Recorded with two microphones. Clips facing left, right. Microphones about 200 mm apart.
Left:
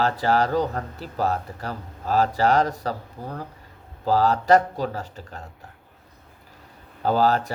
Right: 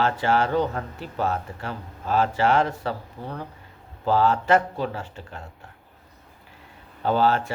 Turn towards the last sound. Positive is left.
turn(degrees=40)  # may be behind; listen again after turning